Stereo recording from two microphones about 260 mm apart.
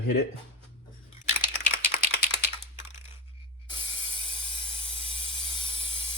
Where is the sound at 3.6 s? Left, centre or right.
Centre.